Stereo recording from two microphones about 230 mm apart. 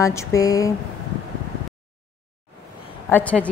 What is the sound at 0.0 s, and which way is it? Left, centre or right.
Speech, centre.